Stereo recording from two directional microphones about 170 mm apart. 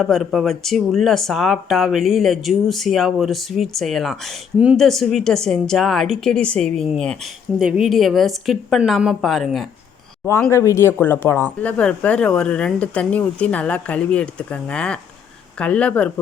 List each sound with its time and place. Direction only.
0.0 s speech: centre (ahead or behind)
10.5 s speech: 15° left (ahead or behind)